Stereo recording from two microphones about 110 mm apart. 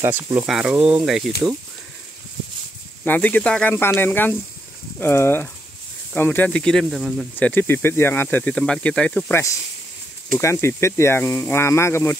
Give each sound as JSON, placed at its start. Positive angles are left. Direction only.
{"t": 0.1, "sound": "speech", "side_deg": -20}
{"t": 0.5, "sound": "speech", "side_deg": -5}
{"t": 3.1, "sound": "speech", "side_deg": 15}
{"t": 7.3, "sound": "speech", "side_deg": 15}
{"t": 8.5, "sound": "speech", "side_deg": 5}
{"t": 9.3, "sound": "speech", "side_deg": 25}